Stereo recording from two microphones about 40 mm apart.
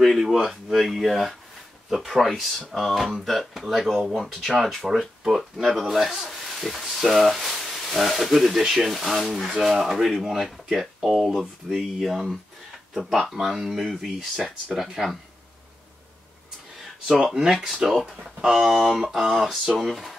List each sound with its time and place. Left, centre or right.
0.4 s speech: centre
4.5 s speech: centre
14.7 s speech: centre
17.2 s speech: centre